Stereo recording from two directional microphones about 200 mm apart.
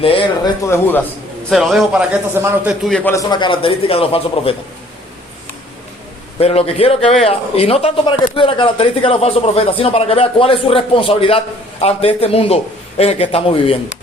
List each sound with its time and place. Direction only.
0.0 s speech: 25° left (ahead or behind)
0.6 s a man's voice: 10° left (ahead or behind)
1.5 s a man's voice: centre (ahead or behind)
2.8 s speech: 5° left (ahead or behind); by 4.5 s 30° left (ahead or behind)
6.4 s speech: 30° left (ahead or behind)